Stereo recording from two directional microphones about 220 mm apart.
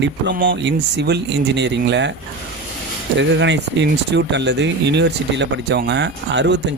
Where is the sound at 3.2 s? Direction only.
55° right (ahead or behind).